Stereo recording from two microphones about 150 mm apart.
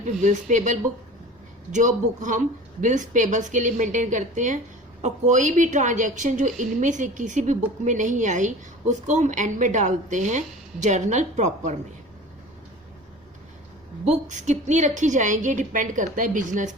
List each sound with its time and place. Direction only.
0.0 s a woman's voice: 55° right (ahead or behind)
14.1 s a woman's voice: 50° right (ahead or behind)